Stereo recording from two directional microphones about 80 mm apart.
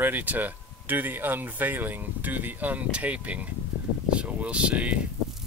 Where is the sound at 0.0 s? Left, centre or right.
Right.